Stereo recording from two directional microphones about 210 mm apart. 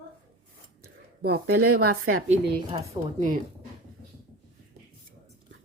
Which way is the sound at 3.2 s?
40° right (ahead or behind).